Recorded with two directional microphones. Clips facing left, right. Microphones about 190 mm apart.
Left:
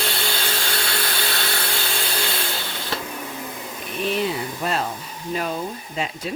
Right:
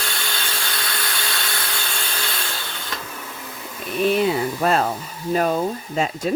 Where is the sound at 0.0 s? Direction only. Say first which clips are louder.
Left 4 dB; 30° left (ahead or behind).